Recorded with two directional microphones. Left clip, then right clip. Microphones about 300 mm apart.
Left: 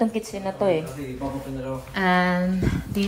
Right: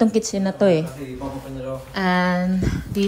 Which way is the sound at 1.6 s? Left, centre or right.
Centre.